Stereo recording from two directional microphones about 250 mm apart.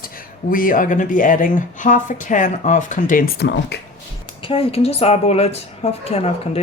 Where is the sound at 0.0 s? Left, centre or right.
Left.